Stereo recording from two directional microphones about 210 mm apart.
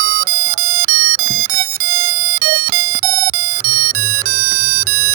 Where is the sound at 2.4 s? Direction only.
45° right (ahead or behind).